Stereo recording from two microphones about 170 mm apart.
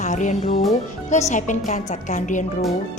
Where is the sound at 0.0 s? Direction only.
45° left (ahead or behind).